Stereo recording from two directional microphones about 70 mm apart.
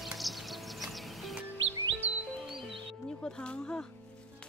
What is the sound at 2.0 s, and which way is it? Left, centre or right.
Music, right.